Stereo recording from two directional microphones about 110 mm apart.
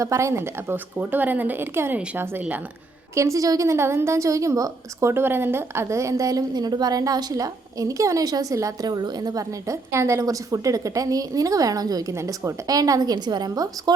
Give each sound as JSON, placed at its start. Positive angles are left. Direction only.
{"t": 0.0, "sound": "a woman's voice", "side_deg": -30}